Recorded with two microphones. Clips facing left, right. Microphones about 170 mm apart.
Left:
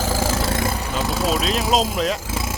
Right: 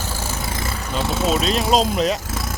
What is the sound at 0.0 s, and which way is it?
Vehicle, 90° left.